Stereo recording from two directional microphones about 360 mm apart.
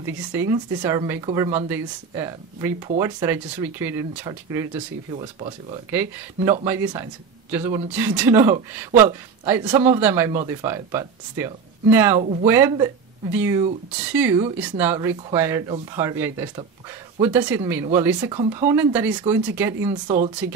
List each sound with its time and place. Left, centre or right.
0.0 s speech: centre
12.2 s speech: centre
12.4 s speech: centre